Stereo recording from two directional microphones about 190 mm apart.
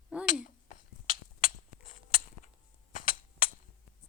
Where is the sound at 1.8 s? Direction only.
50° left (ahead or behind).